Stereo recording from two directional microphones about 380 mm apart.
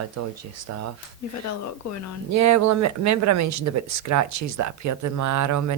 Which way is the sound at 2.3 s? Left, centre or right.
Right.